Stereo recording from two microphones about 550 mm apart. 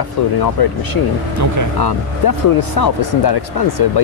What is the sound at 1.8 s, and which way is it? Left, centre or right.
Speech, left.